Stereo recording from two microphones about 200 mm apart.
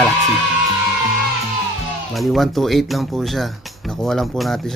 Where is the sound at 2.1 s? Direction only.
Centre (ahead or behind).